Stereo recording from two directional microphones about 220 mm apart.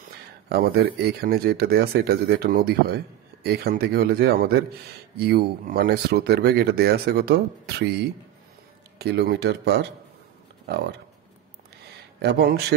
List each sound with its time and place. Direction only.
0.0 s speech: 45° right (ahead or behind)
8.9 s speech: 50° right (ahead or behind)
11.8 s a sound: 50° right (ahead or behind)